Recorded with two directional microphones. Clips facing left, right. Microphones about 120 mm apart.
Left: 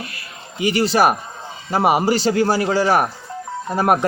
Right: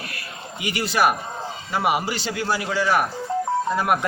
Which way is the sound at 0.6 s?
35° left (ahead or behind).